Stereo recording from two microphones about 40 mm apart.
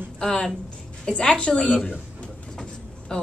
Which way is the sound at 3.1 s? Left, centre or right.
Centre.